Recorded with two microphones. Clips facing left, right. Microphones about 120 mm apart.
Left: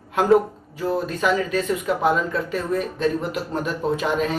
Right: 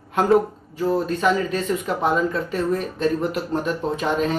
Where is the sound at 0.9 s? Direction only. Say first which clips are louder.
Right 1 dB; 5° left (ahead or behind).